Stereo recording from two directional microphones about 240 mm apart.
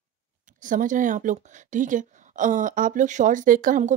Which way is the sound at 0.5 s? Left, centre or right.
Right.